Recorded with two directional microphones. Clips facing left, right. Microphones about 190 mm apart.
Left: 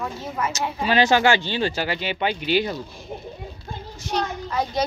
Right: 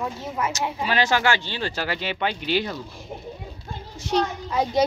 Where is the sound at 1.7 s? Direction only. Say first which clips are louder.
Left 2 dB; 5° left (ahead or behind).